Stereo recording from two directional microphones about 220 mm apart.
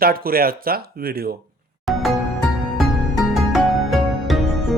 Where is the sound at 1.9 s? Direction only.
Centre (ahead or behind).